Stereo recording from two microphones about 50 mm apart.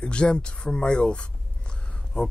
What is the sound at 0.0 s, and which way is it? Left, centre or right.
Speech, centre.